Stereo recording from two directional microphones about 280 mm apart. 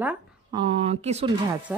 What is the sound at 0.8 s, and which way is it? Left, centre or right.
Speech, right.